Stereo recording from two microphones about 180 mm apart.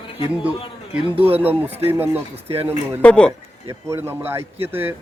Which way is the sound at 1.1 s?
35° right (ahead or behind).